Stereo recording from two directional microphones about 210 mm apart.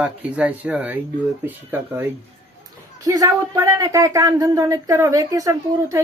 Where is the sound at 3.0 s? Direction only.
15° right (ahead or behind).